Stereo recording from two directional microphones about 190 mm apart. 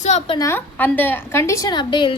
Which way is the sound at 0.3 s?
15° left (ahead or behind).